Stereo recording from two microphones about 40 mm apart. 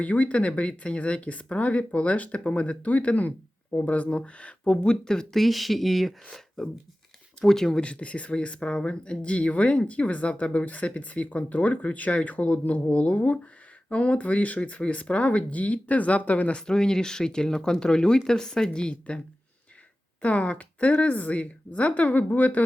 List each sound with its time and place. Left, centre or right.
0.0 s speech: left; by 5.4 s centre
5.4 s speech: centre
7.8 s speech: left
16.6 s speech: centre
20.2 s speech: left